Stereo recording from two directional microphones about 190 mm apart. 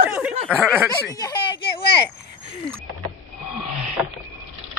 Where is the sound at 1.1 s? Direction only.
20° left (ahead or behind).